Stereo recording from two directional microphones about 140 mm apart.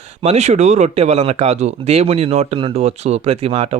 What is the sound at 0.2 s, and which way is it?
Speech, 50° right (ahead or behind).